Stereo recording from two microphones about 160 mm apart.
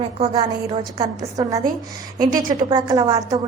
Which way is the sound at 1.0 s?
20° right (ahead or behind).